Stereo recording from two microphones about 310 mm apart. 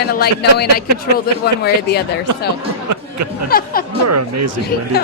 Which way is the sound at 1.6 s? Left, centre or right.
Left.